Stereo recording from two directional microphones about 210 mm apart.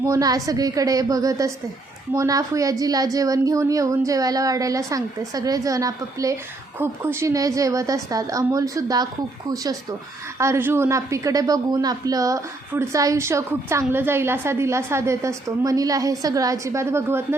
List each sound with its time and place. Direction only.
0.0 s a woman's voice: 15° right (ahead or behind)
10.3 s a woman's voice: 15° right (ahead or behind)